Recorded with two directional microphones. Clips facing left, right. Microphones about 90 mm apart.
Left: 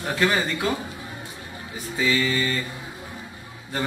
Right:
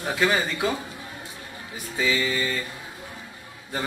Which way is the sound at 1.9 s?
5° right (ahead or behind).